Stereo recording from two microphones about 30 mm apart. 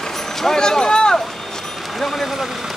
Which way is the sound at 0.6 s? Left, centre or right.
Left.